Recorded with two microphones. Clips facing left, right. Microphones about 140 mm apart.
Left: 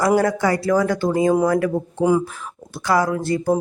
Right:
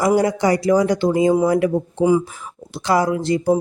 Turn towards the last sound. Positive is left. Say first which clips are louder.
# right 2 dB
turn(degrees=-20)  # may be behind; listen again after turning